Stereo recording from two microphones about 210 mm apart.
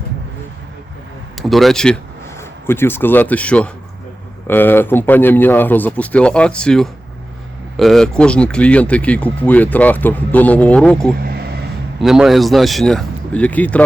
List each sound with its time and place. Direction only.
1.4 s speech: centre (ahead or behind)
11.2 s vehicle: 50° right (ahead or behind)
11.9 s speech: centre (ahead or behind)